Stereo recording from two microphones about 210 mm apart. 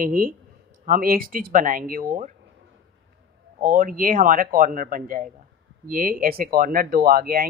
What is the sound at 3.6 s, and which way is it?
A woman's voice, 40° right (ahead or behind).